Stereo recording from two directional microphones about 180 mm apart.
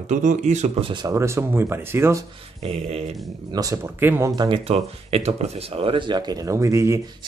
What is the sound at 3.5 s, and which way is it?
Speech, 15° right (ahead or behind).